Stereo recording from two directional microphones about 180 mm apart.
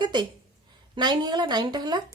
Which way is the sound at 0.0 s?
25° right (ahead or behind).